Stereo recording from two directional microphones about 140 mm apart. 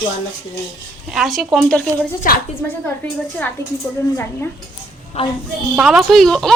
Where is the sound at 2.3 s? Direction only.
90° left.